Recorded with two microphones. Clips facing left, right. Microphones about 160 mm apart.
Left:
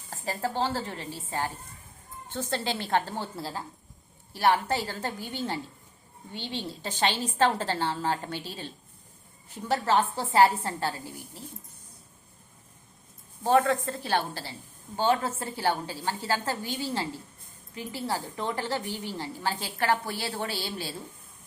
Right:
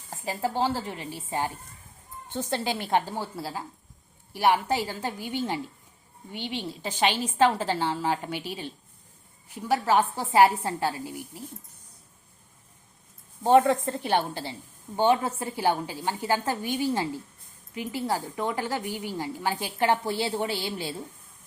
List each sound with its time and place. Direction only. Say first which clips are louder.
0.1 s a woman's voice: right 2 dB; 15° right (ahead or behind)
13.4 s a woman's voice: right 4 dB; 20° right (ahead or behind)